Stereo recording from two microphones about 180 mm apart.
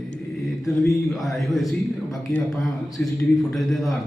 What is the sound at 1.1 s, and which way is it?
A man's voice, centre (ahead or behind).